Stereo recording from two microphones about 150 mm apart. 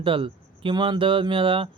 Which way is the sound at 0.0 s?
35° right (ahead or behind).